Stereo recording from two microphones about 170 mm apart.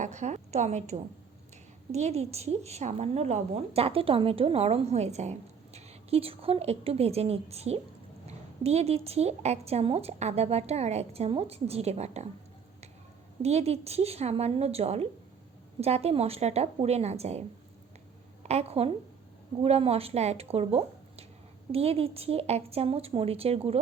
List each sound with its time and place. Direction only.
0.0 s a woman's voice: 45° right (ahead or behind)
13.4 s a woman's voice: 40° right (ahead or behind)
18.4 s a woman's voice: 40° right (ahead or behind)